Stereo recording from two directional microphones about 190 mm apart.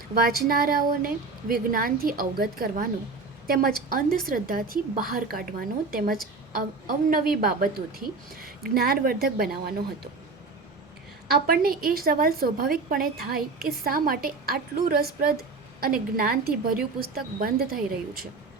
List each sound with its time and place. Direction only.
0.1 s a woman's voice: 50° right (ahead or behind)
11.3 s a woman's voice: 50° right (ahead or behind)